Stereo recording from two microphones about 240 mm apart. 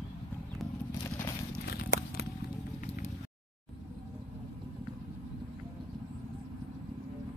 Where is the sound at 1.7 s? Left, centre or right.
Left.